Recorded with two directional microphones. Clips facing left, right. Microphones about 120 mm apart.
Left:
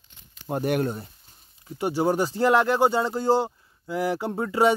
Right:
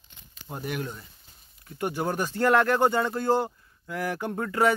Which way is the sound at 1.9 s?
20° left (ahead or behind).